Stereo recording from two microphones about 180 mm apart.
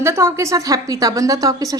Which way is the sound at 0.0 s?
15° right (ahead or behind).